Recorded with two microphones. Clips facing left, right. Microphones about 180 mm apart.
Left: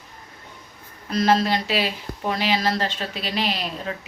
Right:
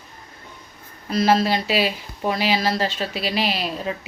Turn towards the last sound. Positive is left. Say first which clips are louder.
# right 3 dB
turn(degrees=-10)  # may be behind; listen again after turning